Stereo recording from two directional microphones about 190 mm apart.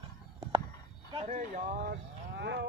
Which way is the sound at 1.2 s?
45° right (ahead or behind).